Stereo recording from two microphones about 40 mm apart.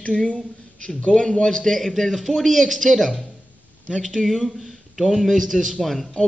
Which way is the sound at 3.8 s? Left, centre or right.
Centre.